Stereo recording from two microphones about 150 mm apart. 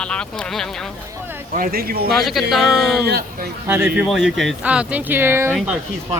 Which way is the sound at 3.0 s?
90° right.